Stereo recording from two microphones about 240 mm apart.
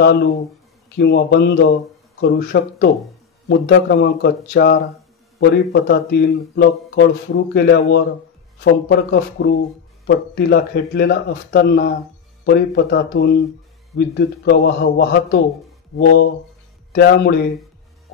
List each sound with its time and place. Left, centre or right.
0.9 s speech: left